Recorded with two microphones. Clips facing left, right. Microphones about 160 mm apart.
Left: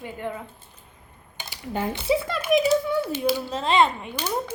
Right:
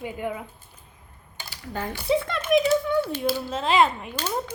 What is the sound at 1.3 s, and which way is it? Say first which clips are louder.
Dishes: left 3 dB; 15° left (ahead or behind).